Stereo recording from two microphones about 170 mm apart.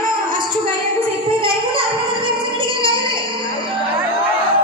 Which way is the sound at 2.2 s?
30° right (ahead or behind).